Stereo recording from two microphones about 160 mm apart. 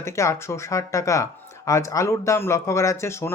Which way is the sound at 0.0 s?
15° left (ahead or behind).